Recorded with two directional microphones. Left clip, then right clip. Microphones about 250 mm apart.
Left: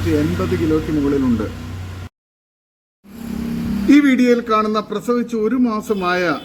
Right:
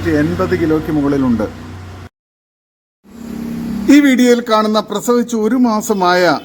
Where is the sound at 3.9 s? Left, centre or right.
Centre.